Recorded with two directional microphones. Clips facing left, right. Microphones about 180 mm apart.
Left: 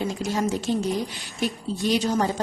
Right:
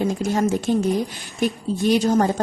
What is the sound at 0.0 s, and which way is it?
A woman's voice, 50° right (ahead or behind).